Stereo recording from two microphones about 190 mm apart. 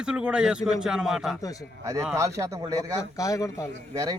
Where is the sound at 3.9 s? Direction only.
15° right (ahead or behind).